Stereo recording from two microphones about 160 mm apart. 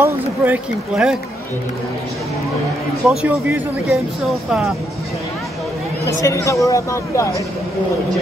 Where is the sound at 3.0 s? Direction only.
5° right (ahead or behind).